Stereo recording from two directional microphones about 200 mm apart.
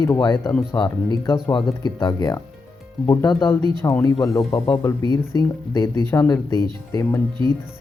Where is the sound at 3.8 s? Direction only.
15° left (ahead or behind).